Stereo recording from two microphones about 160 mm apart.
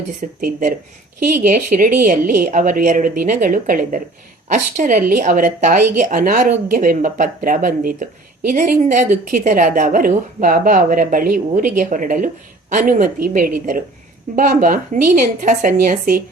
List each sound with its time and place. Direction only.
0.2 s a woman's voice: 50° right (ahead or behind)